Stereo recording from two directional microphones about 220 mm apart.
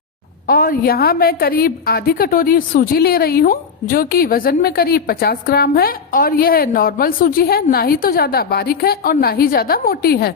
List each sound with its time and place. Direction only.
0.4 s a woman's voice: 40° left (ahead or behind)